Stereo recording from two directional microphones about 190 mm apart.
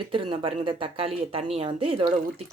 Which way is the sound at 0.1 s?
25° right (ahead or behind).